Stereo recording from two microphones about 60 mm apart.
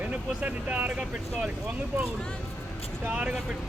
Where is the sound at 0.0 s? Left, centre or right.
Right.